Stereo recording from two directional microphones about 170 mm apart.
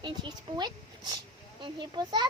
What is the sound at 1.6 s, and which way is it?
Speech, 25° right (ahead or behind).